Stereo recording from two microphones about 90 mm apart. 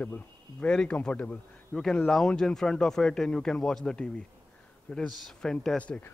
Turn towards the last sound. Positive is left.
turn(degrees=15)  # may be behind; listen again after turning